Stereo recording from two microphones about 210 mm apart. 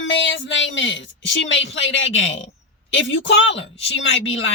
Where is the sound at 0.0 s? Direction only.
60° left (ahead or behind).